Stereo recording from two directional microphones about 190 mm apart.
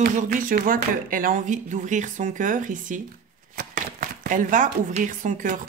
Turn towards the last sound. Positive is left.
turn(degrees=-45)  # may be behind; listen again after turning